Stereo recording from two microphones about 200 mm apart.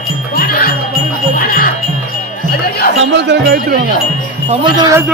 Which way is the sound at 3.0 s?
60° right (ahead or behind).